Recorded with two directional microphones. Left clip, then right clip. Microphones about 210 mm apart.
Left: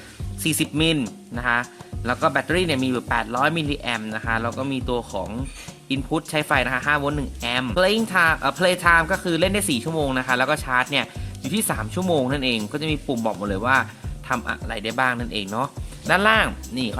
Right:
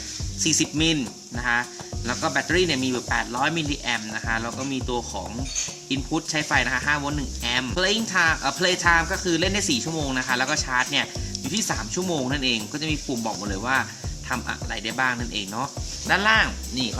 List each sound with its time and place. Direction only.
0.4 s speech: 55° left (ahead or behind)